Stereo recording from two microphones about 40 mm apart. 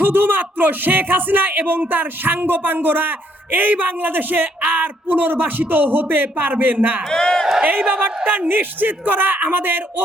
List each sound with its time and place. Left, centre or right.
0.0 s a man's voice: right
7.1 s speech: centre
7.6 s a man's voice: right